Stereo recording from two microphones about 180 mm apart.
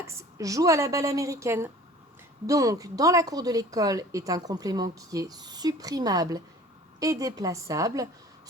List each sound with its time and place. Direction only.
0.0 s speech: 15° right (ahead or behind)